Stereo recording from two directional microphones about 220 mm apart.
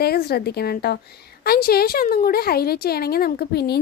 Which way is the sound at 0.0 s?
45° left (ahead or behind).